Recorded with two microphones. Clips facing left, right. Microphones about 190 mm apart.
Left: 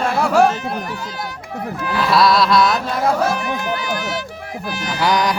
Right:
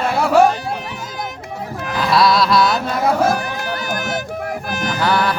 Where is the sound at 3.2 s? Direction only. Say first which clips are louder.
Right 1 dB; 40° right (ahead or behind).